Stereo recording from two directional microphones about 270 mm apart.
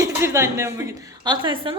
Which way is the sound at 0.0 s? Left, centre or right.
Centre.